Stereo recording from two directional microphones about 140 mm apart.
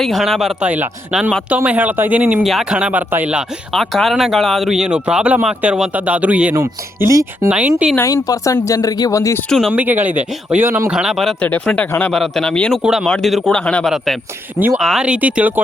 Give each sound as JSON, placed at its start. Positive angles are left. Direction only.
{"t": 0.0, "sound": "speech", "side_deg": 0}
{"t": 2.4, "sound": "speech", "side_deg": 0}
{"t": 7.4, "sound": "speech", "side_deg": -10}
{"t": 7.9, "sound": "speech", "side_deg": 25}
{"t": 9.5, "sound": "speech", "side_deg": 5}
{"t": 9.7, "sound": "speech", "side_deg": -15}
{"t": 11.0, "sound": "speech", "side_deg": 0}
{"t": 11.4, "sound": "speech", "side_deg": 10}
{"t": 12.8, "sound": "speech", "side_deg": -5}